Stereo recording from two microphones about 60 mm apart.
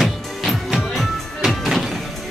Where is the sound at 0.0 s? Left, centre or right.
Centre.